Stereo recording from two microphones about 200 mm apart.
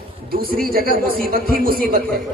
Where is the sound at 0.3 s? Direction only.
50° right (ahead or behind).